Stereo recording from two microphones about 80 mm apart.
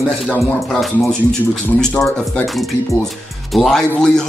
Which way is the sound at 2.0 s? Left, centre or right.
Left.